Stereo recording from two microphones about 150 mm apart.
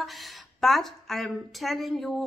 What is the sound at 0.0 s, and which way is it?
Speech, centre (ahead or behind).